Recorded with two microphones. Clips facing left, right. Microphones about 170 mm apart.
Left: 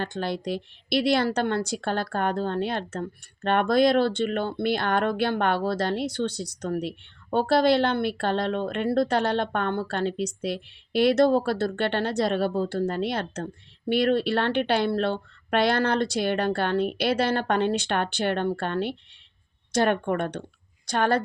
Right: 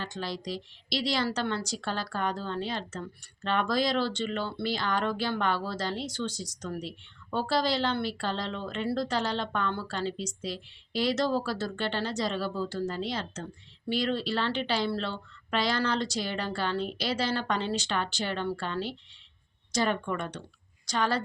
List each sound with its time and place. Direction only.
0.0 s speech: 55° left (ahead or behind)